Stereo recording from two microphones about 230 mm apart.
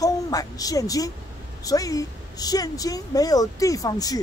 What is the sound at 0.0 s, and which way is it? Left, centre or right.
A woman's voice, centre.